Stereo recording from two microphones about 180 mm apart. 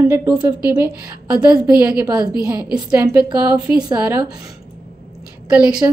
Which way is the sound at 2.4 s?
10° right (ahead or behind).